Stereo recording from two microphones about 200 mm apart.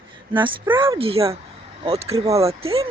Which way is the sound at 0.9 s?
30° right (ahead or behind).